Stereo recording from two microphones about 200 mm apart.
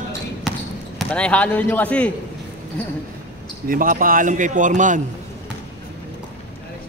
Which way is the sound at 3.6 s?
45° right (ahead or behind).